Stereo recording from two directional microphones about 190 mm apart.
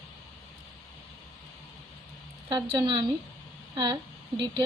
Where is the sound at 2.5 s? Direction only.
20° right (ahead or behind).